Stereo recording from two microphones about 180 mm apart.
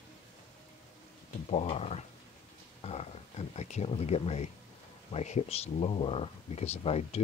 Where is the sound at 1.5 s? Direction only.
35° left (ahead or behind).